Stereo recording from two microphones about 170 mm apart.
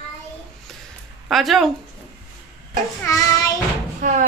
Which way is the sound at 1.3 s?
Centre (ahead or behind).